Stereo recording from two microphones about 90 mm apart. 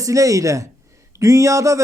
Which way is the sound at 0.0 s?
40° right (ahead or behind).